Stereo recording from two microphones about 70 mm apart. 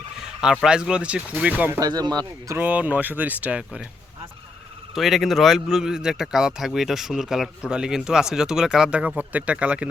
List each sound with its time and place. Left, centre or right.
0.6 s speech: centre
1.8 s speech: right
2.6 s speech: right
3.6 s speech: centre
4.9 s speech: centre
8.9 s speech: centre